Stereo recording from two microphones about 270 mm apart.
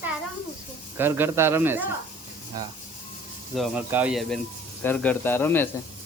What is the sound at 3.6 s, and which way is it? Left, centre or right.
Speech, centre.